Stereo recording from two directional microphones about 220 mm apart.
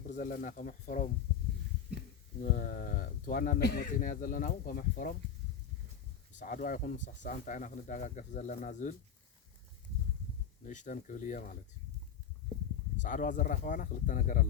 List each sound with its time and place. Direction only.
0.1 s speech: 40° left (ahead or behind)
2.4 s speech: 35° left (ahead or behind)
6.4 s speech: 35° left (ahead or behind)
10.7 s speech: 35° left (ahead or behind)
13.0 s speech: 35° left (ahead or behind)